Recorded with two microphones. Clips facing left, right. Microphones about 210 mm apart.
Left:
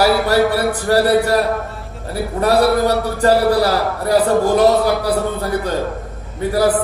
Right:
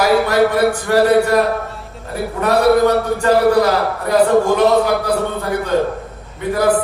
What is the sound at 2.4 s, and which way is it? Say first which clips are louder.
Speech: right 2 dB; 35° left (ahead or behind).